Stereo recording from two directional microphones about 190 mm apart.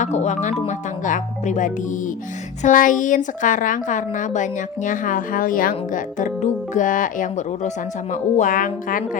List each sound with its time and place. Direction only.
0.0 s a woman's voice: 35° left (ahead or behind)